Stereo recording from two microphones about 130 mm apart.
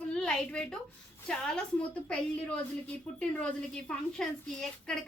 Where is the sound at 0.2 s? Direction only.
10° left (ahead or behind).